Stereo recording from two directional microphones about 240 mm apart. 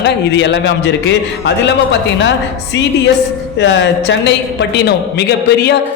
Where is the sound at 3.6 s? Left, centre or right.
Left.